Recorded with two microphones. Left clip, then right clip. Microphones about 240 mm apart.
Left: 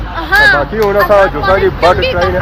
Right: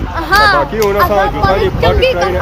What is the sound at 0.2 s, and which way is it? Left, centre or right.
Speech, right.